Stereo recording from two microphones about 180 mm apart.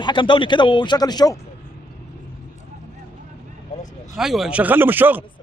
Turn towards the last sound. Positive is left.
turn(degrees=-10)  # may be behind; listen again after turning